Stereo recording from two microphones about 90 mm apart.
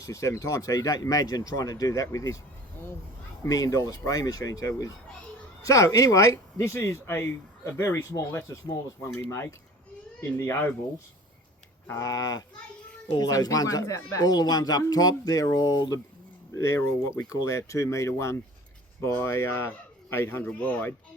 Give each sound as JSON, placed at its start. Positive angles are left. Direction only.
{"t": 0.0, "sound": "speech", "side_deg": 35}
{"t": 3.4, "sound": "a man's voice", "side_deg": 40}
{"t": 11.9, "sound": "a man's voice", "side_deg": 40}